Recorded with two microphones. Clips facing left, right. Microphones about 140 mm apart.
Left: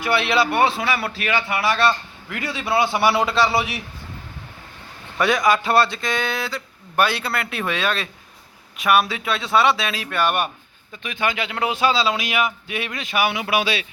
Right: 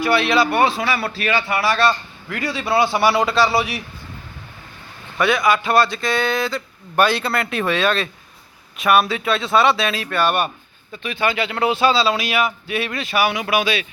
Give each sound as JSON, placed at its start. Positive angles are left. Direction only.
{"t": 0.0, "sound": "a man's voice", "side_deg": 20}
{"t": 5.2, "sound": "a man's voice", "side_deg": 40}